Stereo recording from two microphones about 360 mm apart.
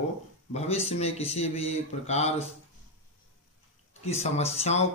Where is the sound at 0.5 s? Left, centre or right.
Centre.